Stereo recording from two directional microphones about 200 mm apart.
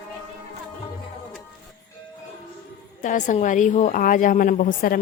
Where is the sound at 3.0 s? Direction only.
40° left (ahead or behind).